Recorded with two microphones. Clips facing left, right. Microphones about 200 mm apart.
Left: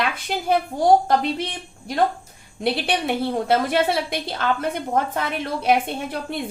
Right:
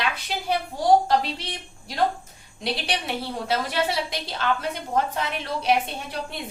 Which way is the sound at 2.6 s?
55° left (ahead or behind).